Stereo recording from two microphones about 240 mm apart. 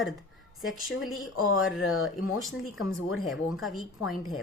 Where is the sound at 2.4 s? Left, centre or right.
Centre.